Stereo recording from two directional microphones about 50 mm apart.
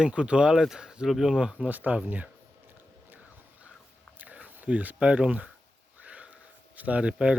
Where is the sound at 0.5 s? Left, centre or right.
Centre.